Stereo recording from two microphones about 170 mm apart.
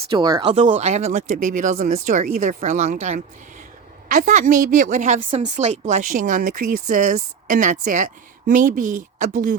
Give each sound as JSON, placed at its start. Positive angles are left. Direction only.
{"t": 0.1, "sound": "speech", "side_deg": -25}
{"t": 0.6, "sound": "speech", "side_deg": -40}